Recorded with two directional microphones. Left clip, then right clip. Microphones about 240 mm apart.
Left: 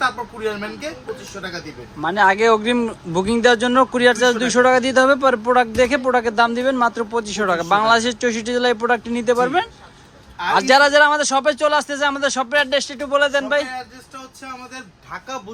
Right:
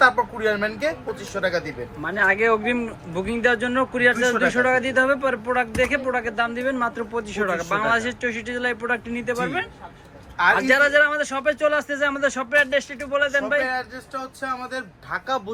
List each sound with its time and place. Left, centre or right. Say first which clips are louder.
0.0 s speech: right 4 dB; centre
2.0 s speech: left 5 dB; centre